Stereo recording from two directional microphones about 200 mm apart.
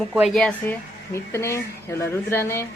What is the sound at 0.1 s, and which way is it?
A woman's voice, centre (ahead or behind).